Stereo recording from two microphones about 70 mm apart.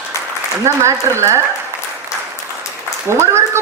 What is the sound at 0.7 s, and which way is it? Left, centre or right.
Speech, right.